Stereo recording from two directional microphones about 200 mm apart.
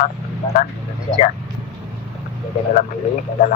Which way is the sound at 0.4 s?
20° left (ahead or behind).